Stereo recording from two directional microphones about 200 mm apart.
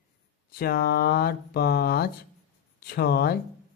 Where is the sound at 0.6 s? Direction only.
50° left (ahead or behind).